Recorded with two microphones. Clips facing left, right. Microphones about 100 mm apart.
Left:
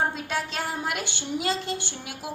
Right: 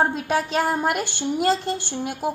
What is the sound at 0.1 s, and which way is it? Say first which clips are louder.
A woman's voice: right 7 dB; 50° right (ahead or behind).